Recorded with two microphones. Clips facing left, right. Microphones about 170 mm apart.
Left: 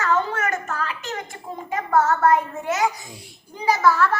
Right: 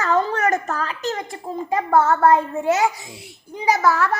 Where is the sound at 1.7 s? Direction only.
35° right (ahead or behind).